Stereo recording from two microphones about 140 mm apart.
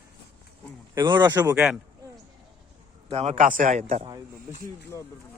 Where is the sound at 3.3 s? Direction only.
70° right (ahead or behind).